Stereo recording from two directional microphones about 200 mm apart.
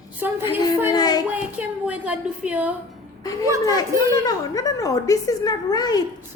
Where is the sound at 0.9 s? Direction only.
20° left (ahead or behind).